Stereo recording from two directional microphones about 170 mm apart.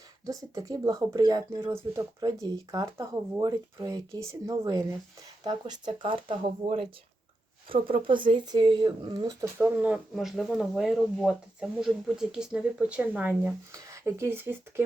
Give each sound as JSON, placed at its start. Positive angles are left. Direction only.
{"t": 0.3, "sound": "speech", "side_deg": -20}